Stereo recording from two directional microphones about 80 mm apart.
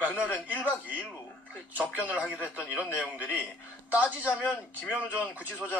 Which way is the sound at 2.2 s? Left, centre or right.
Centre.